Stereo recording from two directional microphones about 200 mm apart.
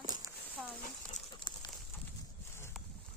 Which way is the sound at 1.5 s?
20° left (ahead or behind).